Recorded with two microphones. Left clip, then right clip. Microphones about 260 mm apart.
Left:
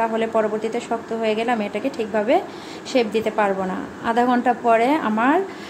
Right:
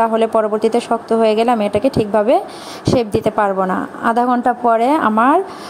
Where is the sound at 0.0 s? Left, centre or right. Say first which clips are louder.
Right 6 dB; right.